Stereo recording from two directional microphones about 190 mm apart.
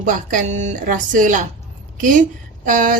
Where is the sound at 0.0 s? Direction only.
45° right (ahead or behind).